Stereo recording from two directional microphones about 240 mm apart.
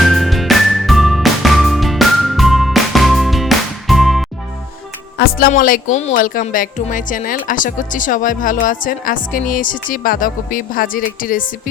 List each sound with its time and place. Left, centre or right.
0.0 s music: centre
5.1 s speech: left